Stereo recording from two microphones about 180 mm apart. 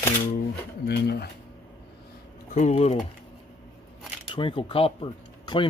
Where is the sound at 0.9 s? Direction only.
60° left (ahead or behind).